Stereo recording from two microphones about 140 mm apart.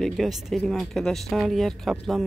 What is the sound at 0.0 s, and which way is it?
Speech, centre (ahead or behind).